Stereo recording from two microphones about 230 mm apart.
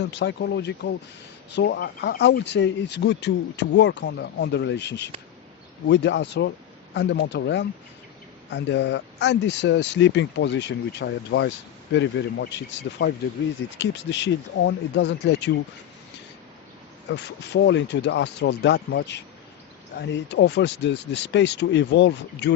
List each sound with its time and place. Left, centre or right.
0.0 s speech: left
17.1 s speech: left